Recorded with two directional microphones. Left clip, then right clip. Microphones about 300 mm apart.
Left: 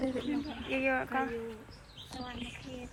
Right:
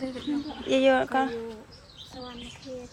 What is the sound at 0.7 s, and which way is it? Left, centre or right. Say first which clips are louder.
Speech: right 10 dB; right.